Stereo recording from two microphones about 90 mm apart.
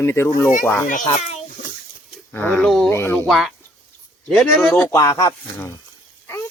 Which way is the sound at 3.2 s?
Centre (ahead or behind).